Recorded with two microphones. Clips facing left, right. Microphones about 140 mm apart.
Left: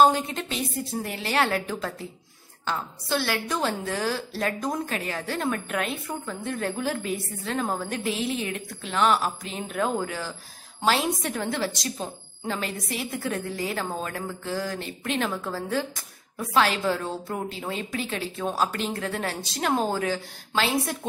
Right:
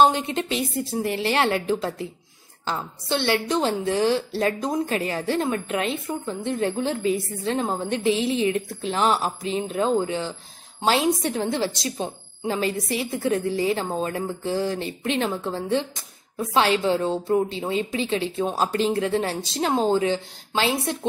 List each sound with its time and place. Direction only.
0.1 s a woman's voice: 25° right (ahead or behind)